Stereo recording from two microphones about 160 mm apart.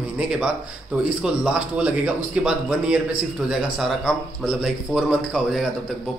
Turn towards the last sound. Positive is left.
turn(degrees=-5)  # may be behind; listen again after turning